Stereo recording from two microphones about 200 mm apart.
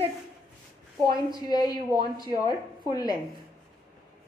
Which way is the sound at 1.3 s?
20° left (ahead or behind).